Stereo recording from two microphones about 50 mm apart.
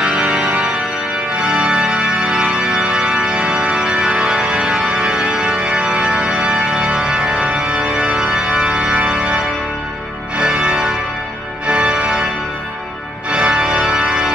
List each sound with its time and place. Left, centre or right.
0.0 s music: centre
1.4 s organ: centre
11.6 s music: right
13.3 s organ: right